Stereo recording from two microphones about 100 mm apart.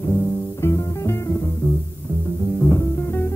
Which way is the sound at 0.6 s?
30° left (ahead or behind).